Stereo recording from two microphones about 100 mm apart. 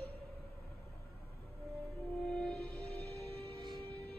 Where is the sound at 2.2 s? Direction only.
10° left (ahead or behind).